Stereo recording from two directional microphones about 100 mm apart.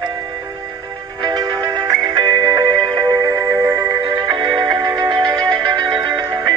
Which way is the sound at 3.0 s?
35° right (ahead or behind).